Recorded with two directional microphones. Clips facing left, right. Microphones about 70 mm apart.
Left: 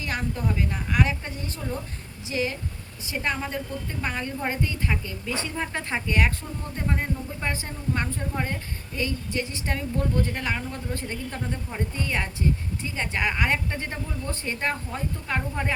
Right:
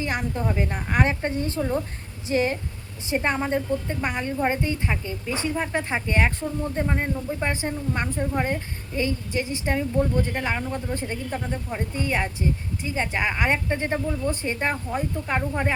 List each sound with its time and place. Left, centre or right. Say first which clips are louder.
0.0 s a woman's voice: right 3 dB; right
3.1 s a woman's voice: right 5 dB; right
4.0 s a woman's voice: right 2 dB; centre